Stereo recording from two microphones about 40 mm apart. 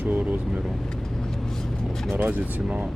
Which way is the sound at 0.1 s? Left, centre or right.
Right.